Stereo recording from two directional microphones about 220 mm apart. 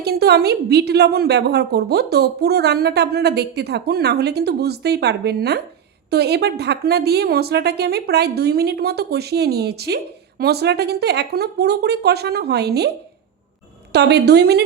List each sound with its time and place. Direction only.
0.0 s a woman's voice: 45° right (ahead or behind)
13.9 s a woman's voice: 50° right (ahead or behind)